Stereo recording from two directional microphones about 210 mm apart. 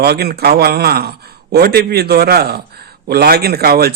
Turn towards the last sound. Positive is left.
turn(degrees=-50)  # may be behind; listen again after turning